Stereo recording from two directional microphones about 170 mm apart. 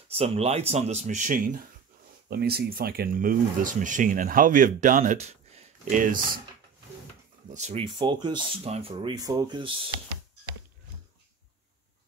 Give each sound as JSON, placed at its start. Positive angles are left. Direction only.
{"t": 0.1, "sound": "speech", "side_deg": -35}
{"t": 2.2, "sound": "speech", "side_deg": -65}
{"t": 7.5, "sound": "speech", "side_deg": -40}
{"t": 7.8, "sound": "speech", "side_deg": -30}